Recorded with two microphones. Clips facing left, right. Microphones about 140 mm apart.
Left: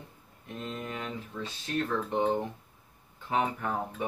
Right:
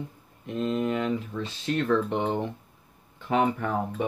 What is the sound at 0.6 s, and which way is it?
Speech, 90° right.